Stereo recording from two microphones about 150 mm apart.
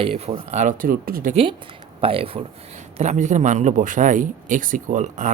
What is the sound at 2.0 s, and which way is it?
Speech, 40° right (ahead or behind).